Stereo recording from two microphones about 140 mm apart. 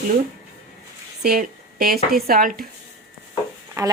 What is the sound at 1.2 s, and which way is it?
A woman's voice, 90° right.